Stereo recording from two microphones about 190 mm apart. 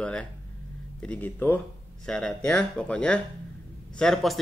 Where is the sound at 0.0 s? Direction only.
5° left (ahead or behind).